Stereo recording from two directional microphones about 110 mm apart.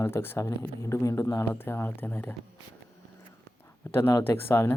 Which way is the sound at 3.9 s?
20° left (ahead or behind).